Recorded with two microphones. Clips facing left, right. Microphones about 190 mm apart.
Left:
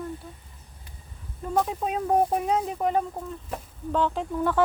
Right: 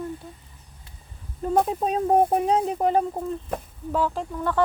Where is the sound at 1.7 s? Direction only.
35° right (ahead or behind).